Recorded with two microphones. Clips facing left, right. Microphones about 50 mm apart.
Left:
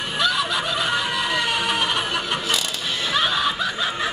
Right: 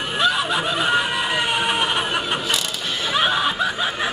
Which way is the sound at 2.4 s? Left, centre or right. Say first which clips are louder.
Right 1 dB; centre.